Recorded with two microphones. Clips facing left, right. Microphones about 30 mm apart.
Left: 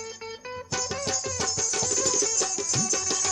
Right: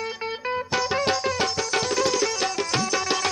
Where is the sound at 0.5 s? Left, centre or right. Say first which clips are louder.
Right 8 dB; right.